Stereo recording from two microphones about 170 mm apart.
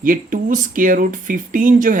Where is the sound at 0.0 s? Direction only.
50° right (ahead or behind).